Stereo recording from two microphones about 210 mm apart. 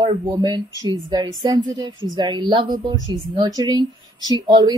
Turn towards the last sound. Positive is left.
turn(degrees=-20)  # may be behind; listen again after turning